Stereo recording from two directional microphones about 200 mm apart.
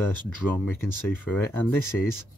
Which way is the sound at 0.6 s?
10° left (ahead or behind).